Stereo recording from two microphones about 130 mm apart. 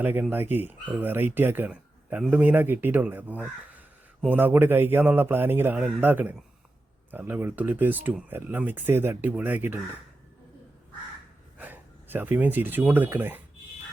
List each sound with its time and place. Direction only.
0.0 s speech: 15° right (ahead or behind)
11.5 s speech: 15° right (ahead or behind)